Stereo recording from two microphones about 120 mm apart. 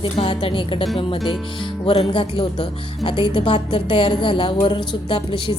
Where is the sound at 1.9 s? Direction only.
45° left (ahead or behind).